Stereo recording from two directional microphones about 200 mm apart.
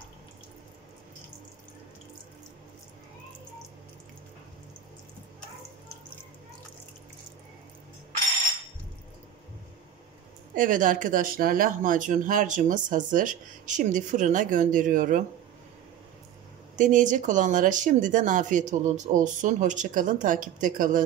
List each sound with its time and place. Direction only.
10.5 s speech: 40° right (ahead or behind)
16.7 s speech: 40° right (ahead or behind)